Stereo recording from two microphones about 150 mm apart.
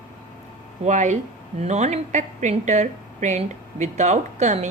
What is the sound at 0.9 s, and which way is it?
A woman's voice, 55° right (ahead or behind).